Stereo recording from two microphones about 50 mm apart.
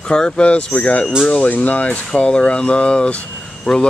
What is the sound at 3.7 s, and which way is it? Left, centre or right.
Speech, centre.